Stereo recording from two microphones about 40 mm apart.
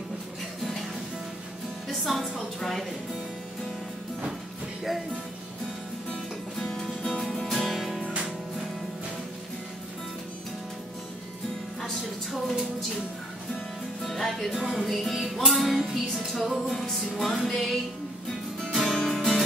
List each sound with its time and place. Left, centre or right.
2.1 s music: centre
6.6 s music: centre
12.0 s a sound: centre
14.0 s music: centre
14.5 s music: centre